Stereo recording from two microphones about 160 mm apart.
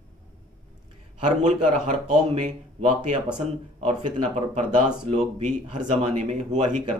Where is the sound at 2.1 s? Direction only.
50° right (ahead or behind).